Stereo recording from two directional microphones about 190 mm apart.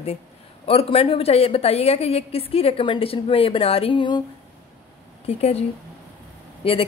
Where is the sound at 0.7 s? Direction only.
30° left (ahead or behind).